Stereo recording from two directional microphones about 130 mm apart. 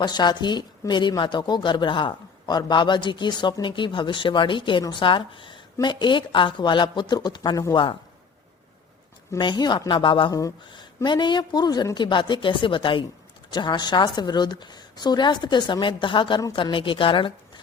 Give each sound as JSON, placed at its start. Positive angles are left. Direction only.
{"t": 0.0, "sound": "speech", "side_deg": 35}
{"t": 9.4, "sound": "speech", "side_deg": 35}